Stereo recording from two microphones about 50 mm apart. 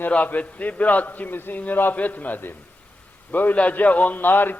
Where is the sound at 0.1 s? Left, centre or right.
Left.